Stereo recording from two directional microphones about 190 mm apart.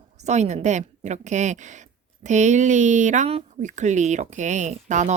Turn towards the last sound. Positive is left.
turn(degrees=-40)  # may be behind; listen again after turning